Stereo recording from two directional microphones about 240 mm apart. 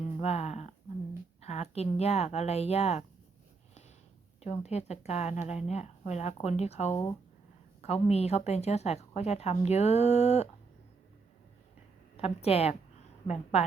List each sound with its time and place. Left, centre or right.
0.2 s a sound: left
1.4 s a woman's voice: left
4.4 s a woman's voice: left
12.1 s a woman's voice: left